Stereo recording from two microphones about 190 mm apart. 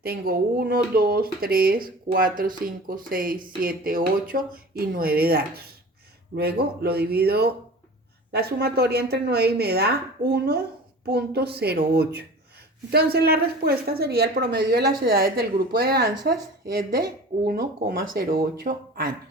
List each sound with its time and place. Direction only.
0.0 s a woman's voice: 50° right (ahead or behind)